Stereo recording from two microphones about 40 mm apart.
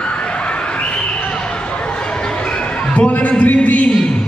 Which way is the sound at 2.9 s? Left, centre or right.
Left.